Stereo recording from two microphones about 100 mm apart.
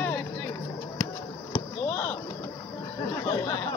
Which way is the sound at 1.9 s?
25° left (ahead or behind).